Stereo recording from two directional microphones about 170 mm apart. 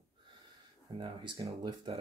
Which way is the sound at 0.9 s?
30° right (ahead or behind).